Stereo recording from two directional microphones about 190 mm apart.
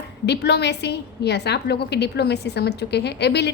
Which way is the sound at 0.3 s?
60° left (ahead or behind).